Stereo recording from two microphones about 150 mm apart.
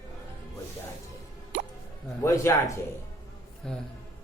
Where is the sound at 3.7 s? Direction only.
5° left (ahead or behind).